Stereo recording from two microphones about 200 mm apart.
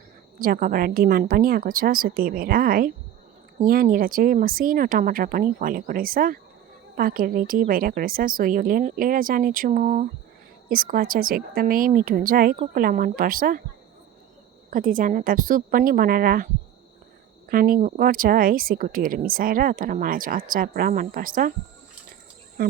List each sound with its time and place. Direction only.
0.3 s speech: 45° right (ahead or behind)
14.7 s speech: 45° right (ahead or behind)
17.5 s speech: 45° right (ahead or behind)